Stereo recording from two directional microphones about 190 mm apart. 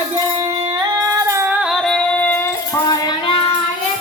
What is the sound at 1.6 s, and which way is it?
Female singing, centre (ahead or behind).